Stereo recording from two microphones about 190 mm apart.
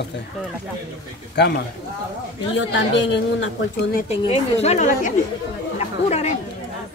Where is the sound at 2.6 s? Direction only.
70° left (ahead or behind).